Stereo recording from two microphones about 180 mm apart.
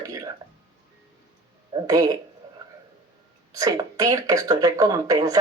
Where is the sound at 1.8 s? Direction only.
20° right (ahead or behind).